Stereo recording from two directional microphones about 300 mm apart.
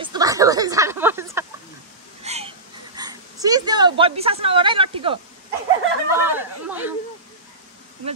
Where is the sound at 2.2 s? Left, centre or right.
Right.